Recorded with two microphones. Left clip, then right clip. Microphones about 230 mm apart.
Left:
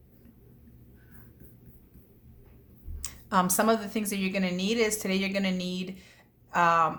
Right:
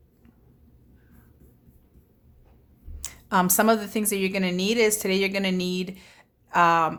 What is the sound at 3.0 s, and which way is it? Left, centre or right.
A woman's voice, right.